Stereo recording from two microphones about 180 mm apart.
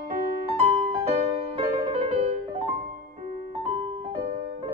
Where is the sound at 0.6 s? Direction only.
30° right (ahead or behind).